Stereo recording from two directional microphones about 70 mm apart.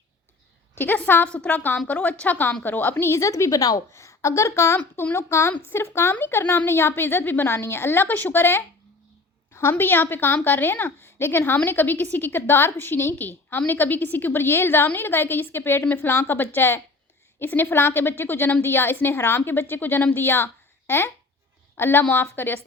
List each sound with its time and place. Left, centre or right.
0.8 s a woman's voice: left
3.2 s speech: left
3.9 s a woman's voice: left